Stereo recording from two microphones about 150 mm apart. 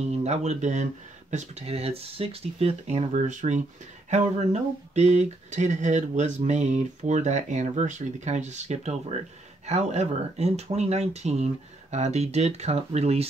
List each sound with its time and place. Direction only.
0.0 s speech: 45° right (ahead or behind)